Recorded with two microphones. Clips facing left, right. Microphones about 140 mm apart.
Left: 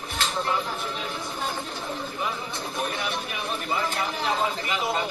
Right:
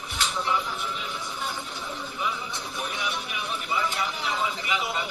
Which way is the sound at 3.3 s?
45° left (ahead or behind).